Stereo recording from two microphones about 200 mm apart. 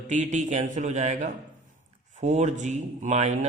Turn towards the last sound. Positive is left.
turn(degrees=-35)  # may be behind; listen again after turning